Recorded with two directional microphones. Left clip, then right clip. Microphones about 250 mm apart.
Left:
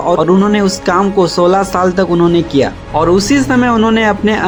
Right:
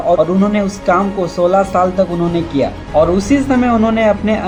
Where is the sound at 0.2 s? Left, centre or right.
Left.